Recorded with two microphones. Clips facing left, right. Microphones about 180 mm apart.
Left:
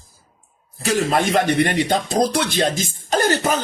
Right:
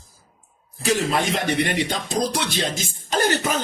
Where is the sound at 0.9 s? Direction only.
50° left (ahead or behind).